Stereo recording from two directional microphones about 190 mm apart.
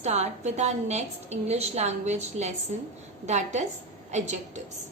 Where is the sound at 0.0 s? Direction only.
35° right (ahead or behind).